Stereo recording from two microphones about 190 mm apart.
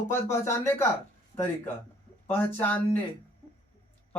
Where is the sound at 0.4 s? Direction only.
15° left (ahead or behind).